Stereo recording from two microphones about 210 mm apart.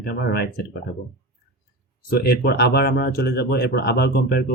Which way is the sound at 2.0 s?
50° left (ahead or behind).